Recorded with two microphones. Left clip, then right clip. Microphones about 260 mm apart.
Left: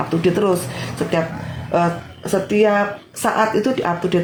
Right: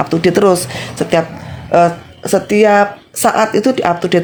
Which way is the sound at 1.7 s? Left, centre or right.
Right.